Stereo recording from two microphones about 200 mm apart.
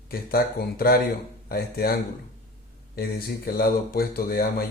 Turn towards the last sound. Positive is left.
turn(degrees=50)  # may be behind; listen again after turning